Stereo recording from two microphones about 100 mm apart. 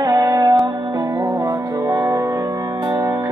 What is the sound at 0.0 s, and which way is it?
Music, 35° right (ahead or behind).